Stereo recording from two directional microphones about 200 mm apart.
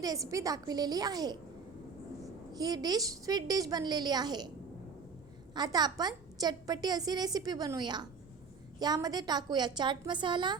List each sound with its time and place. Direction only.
0.0 s a woman's voice: 15° right (ahead or behind)
2.5 s a woman's voice: 20° right (ahead or behind)
5.5 s a woman's voice: 20° right (ahead or behind)